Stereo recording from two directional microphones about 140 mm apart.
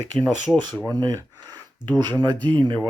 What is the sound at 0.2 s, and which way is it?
Speech, 5° left (ahead or behind).